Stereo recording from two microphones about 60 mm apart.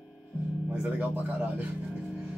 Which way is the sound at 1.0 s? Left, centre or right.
Right.